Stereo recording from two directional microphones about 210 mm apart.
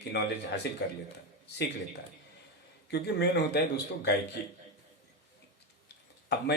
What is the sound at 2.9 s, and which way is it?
Speech, 50° left (ahead or behind).